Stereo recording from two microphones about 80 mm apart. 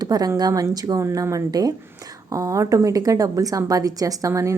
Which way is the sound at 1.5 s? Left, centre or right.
Right.